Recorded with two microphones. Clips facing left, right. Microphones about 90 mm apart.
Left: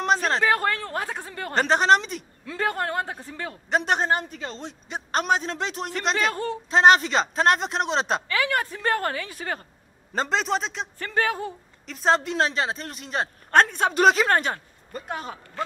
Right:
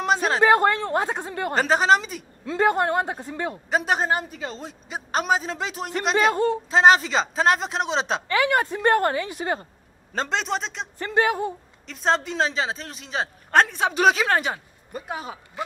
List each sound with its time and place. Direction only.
0.0 s a sound: 5° right (ahead or behind)
0.5 s speech: 20° right (ahead or behind)
1.5 s speech: 5° right (ahead or behind)
2.4 s speech: 20° right (ahead or behind)
3.7 s speech: 5° right (ahead or behind)
8.3 s speech: 20° right (ahead or behind)
10.1 s speech: centre (ahead or behind)
11.0 s speech: 20° right (ahead or behind)
11.8 s speech: centre (ahead or behind)